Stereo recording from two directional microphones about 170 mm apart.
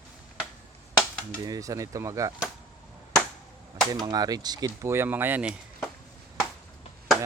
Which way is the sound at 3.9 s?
25° right (ahead or behind).